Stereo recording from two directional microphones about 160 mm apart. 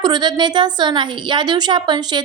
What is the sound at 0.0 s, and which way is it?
A woman's voice, 25° right (ahead or behind).